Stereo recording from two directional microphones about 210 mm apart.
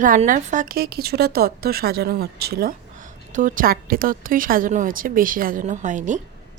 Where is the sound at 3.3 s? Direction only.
40° right (ahead or behind).